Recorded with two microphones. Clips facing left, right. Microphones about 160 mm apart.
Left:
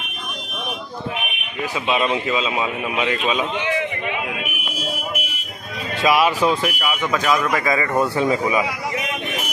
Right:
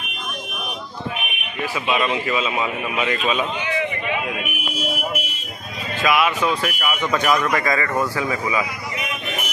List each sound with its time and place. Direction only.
1.9 s a man's voice: 25° left (ahead or behind); by 3.4 s 10° left (ahead or behind)
6.0 s speech: 35° left (ahead or behind)
6.6 s speech: 10° left (ahead or behind)
7.1 s a man's voice: centre (ahead or behind); by 8.6 s 20° left (ahead or behind)